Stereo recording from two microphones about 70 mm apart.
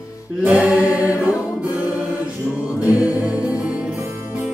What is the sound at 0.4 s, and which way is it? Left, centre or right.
Music, centre.